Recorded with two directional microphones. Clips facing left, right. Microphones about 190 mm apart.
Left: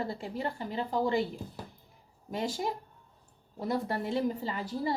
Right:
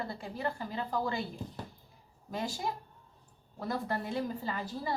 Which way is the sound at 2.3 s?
20° left (ahead or behind).